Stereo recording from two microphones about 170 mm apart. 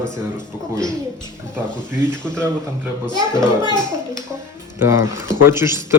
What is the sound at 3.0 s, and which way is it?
Speech, 25° left (ahead or behind).